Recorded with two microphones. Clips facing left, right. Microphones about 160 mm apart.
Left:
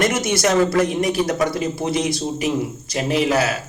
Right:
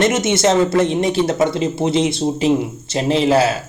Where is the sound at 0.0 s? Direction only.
25° right (ahead or behind).